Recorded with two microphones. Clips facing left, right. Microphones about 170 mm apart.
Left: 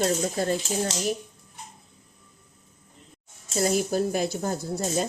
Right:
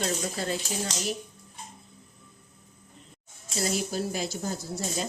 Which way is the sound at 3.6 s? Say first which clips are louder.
Left 6 dB; 50° left (ahead or behind).